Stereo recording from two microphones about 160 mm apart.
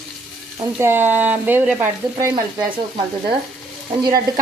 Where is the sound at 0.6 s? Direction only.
15° right (ahead or behind).